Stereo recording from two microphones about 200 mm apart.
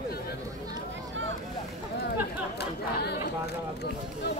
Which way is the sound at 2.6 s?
55° left (ahead or behind).